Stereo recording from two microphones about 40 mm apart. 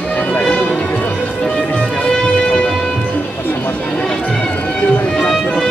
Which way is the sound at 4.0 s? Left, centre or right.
Left.